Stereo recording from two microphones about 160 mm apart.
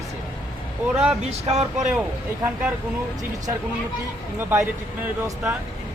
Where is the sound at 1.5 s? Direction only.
45° right (ahead or behind).